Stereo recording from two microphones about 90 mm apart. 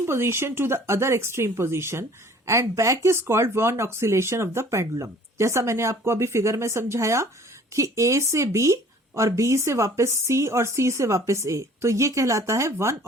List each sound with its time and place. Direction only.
0.0 s speech: 30° right (ahead or behind)